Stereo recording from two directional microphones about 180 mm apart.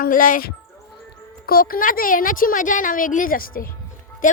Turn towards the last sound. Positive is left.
turn(degrees=50)  # may be behind; listen again after turning